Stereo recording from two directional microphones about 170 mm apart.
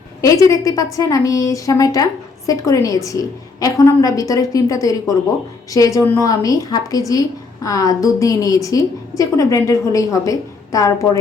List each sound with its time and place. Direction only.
0.5 s a woman's voice: 20° left (ahead or behind)